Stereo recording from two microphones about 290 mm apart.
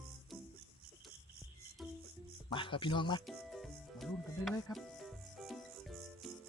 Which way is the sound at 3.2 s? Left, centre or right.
Centre.